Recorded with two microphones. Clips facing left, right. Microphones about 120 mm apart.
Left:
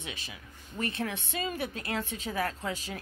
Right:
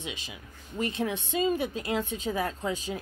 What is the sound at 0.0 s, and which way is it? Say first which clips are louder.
A woman's voice: right 3 dB; 15° right (ahead or behind).